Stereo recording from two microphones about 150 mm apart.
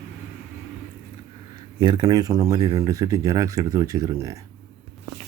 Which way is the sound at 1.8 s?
30° right (ahead or behind).